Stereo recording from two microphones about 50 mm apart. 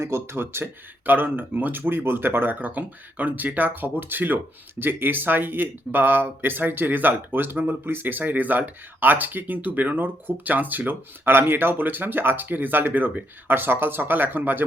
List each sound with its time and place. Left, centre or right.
0.0 s speech: right